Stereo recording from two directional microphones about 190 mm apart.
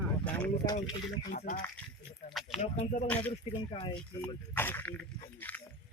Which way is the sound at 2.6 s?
40° left (ahead or behind).